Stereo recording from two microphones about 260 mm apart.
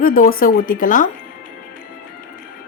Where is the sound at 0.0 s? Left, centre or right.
Left.